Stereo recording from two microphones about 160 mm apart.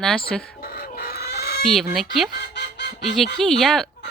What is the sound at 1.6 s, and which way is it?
Speech, centre (ahead or behind).